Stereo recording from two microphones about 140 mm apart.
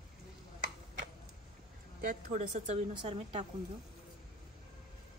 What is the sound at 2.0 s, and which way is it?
Speech, 60° right (ahead or behind).